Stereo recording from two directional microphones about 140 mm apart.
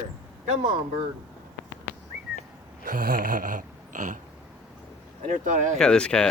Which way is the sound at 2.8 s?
85° right.